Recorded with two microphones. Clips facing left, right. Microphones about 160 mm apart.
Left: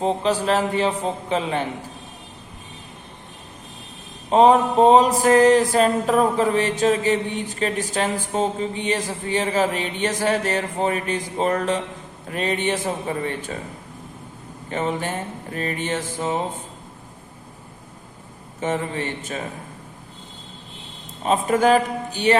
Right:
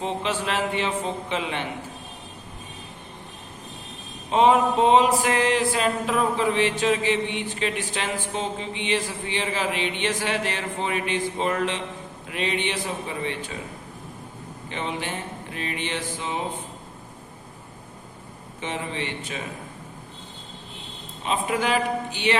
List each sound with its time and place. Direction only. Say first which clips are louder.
0.0 s a sound: left 6 dB; 40° left (ahead or behind)
4.3 s a sound: left 4 dB; 40° left (ahead or behind)
12.3 s music: left 4 dB; 45° left (ahead or behind)
14.7 s music: left 6 dB; 45° left (ahead or behind)
18.6 s music: left 6 dB; 45° left (ahead or behind)
21.2 s music: left 7 dB; 45° left (ahead or behind)